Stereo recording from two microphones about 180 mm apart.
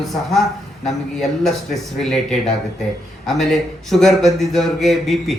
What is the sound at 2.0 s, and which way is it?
Speech, centre (ahead or behind).